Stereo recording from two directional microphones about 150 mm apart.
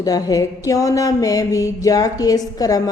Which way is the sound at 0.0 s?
25° left (ahead or behind).